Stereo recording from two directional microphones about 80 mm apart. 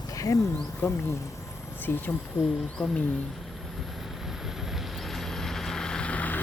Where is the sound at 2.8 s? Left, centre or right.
Centre.